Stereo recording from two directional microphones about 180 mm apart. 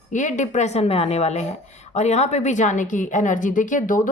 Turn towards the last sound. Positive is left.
turn(degrees=45)  # may be behind; listen again after turning